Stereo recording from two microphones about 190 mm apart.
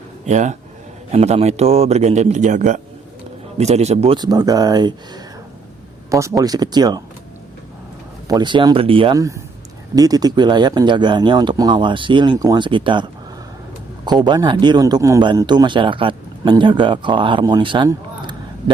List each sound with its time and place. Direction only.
0.3 s a man's voice: 40° right (ahead or behind)
4.2 s a man's voice: 20° right (ahead or behind)
8.3 s a man's voice: 25° right (ahead or behind)